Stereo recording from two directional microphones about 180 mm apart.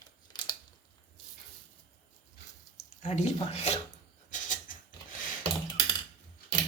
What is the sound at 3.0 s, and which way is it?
Speech, 40° left (ahead or behind).